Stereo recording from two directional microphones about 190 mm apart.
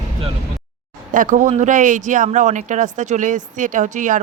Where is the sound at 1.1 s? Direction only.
45° right (ahead or behind).